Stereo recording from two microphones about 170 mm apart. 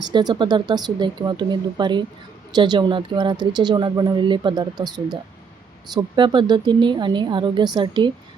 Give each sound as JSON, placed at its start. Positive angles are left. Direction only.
{"t": 0.0, "sound": "speech", "side_deg": -25}